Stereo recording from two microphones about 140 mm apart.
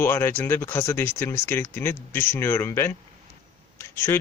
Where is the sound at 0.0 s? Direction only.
15° left (ahead or behind).